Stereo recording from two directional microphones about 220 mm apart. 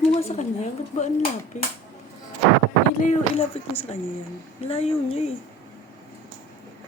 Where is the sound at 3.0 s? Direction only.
25° left (ahead or behind).